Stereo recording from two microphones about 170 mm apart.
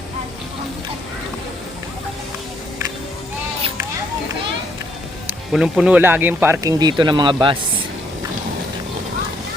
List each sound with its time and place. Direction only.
5.5 s speech: 5° right (ahead or behind); by 7.5 s 25° right (ahead or behind)